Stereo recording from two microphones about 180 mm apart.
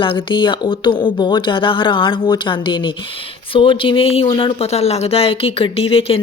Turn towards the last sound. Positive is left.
turn(degrees=30)  # may be behind; listen again after turning